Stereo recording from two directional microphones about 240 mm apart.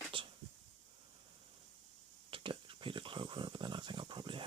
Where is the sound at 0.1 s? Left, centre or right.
Right.